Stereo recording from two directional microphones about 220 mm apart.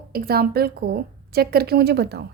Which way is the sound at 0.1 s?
45° right (ahead or behind).